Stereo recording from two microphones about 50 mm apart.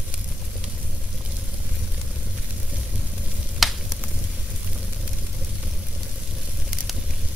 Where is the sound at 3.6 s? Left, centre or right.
Centre.